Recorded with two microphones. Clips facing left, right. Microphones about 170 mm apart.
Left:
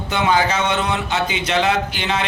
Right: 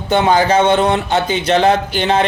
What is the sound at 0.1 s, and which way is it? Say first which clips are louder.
Speech: right 6 dB; 35° right (ahead or behind).